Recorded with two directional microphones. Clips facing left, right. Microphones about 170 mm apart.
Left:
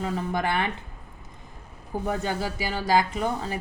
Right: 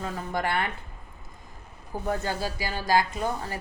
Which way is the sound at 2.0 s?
20° left (ahead or behind).